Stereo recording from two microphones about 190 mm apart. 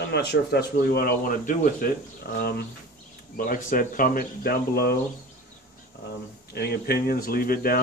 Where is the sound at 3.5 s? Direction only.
45° left (ahead or behind).